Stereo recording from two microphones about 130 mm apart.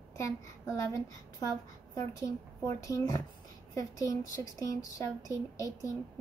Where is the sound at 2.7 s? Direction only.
25° left (ahead or behind).